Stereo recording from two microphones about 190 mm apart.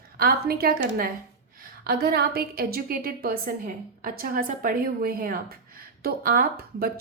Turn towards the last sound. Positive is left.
turn(degrees=-50)  # may be behind; listen again after turning